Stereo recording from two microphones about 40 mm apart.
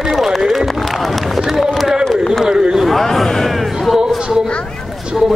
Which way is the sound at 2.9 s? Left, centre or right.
Centre.